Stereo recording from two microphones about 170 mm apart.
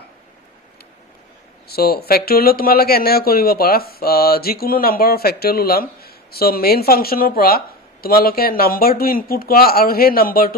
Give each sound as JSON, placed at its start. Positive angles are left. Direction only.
{"t": 1.7, "sound": "speech", "side_deg": 65}